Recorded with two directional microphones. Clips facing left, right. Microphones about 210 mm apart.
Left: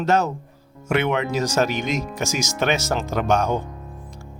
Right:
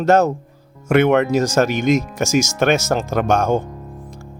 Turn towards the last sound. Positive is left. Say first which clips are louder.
# right 4 dB
turn(degrees=-50)  # may be behind; listen again after turning